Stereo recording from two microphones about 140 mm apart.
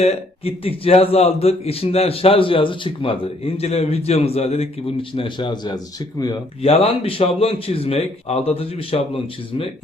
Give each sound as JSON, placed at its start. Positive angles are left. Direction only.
{"t": 0.0, "sound": "a man's voice", "side_deg": 45}
{"t": 6.6, "sound": "a man's voice", "side_deg": 45}